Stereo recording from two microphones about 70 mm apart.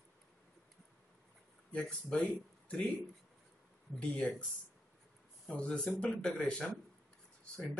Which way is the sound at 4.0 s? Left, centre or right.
Centre.